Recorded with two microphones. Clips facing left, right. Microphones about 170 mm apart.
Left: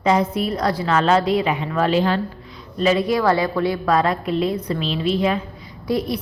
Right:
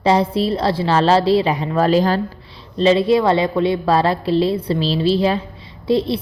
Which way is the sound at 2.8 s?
25° right (ahead or behind).